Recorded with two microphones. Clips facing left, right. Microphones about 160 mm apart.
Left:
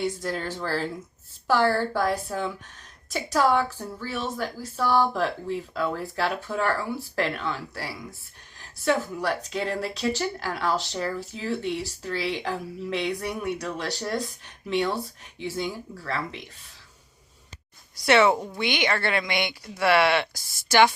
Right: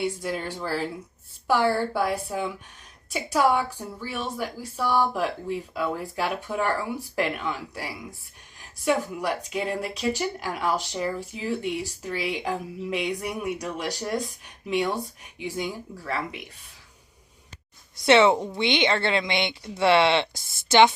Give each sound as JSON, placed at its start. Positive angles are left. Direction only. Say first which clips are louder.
{"t": 0.0, "sound": "speech", "louder": "even", "side_deg": -10}
{"t": 18.0, "sound": "speech", "louder": "right 2 dB", "side_deg": -25}